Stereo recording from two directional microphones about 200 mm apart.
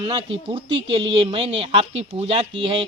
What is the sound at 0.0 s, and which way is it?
Speech, 25° right (ahead or behind).